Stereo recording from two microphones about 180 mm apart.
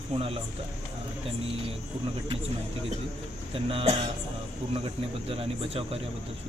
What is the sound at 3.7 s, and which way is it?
Speech, 35° right (ahead or behind).